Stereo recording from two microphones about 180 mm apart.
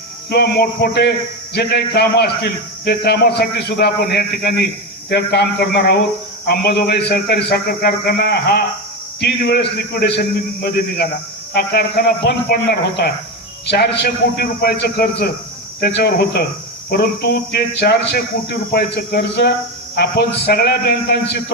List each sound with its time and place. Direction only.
0.3 s a man's voice: 60° left (ahead or behind)